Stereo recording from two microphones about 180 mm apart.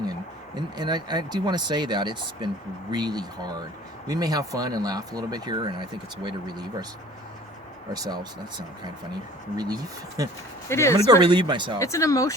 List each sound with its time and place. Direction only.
0.5 s speech: 25° right (ahead or behind)
7.9 s speech: 20° right (ahead or behind)
10.2 s speech: 20° right (ahead or behind)
10.7 s speech: 15° left (ahead or behind)
10.9 s speech: 25° right (ahead or behind)
11.8 s speech: 15° left (ahead or behind)